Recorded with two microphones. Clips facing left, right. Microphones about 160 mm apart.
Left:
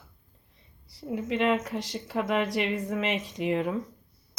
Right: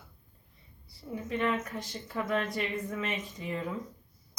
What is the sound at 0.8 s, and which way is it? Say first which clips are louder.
Speech: left 7 dB; 90° left.